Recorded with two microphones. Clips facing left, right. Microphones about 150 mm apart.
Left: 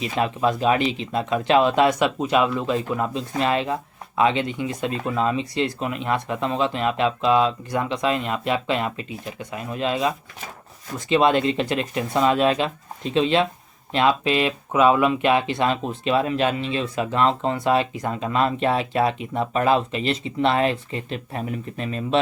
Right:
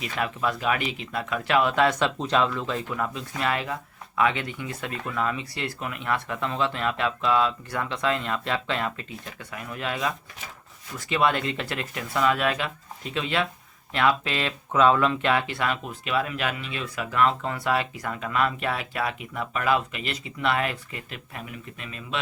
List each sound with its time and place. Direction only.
0.0 s speech: 25° left (ahead or behind)